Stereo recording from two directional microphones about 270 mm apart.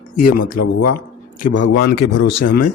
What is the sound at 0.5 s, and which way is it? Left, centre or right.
Speech, left.